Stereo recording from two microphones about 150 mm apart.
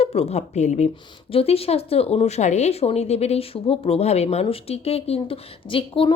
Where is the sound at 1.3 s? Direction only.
40° left (ahead or behind).